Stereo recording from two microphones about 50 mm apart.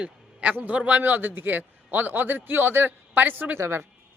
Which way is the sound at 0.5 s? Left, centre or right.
Right.